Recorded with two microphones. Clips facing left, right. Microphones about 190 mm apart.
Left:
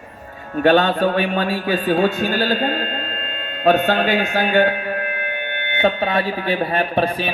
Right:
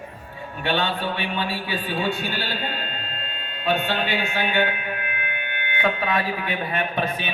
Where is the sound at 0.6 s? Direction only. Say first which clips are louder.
Left 10 dB; 45° left (ahead or behind).